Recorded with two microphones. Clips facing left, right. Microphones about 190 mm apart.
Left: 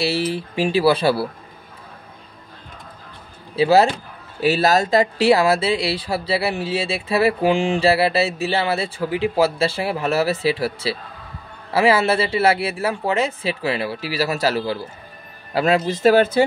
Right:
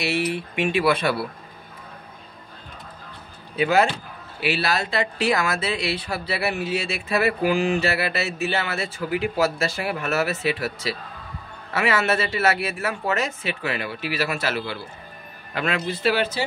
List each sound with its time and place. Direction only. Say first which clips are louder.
0.0 s speech: left 3 dB; 30° left (ahead or behind)
3.5 s speech: left 5 dB; 35° left (ahead or behind); by 16.4 s 50° left (ahead or behind)